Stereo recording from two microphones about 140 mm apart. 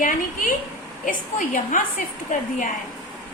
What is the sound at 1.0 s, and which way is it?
Speech, 70° left (ahead or behind).